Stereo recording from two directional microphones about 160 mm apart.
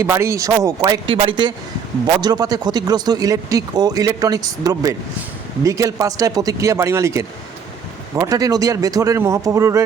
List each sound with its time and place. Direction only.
0.0 s speech: 15° right (ahead or behind)
1.0 s a man's voice: 35° right (ahead or behind)